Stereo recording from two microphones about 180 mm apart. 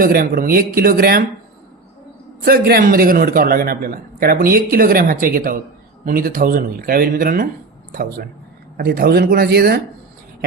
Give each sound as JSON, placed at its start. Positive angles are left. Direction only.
{"t": 0.0, "sound": "a man's voice", "side_deg": -50}
{"t": 2.4, "sound": "a man's voice", "side_deg": -60}
{"t": 8.8, "sound": "speech", "side_deg": -55}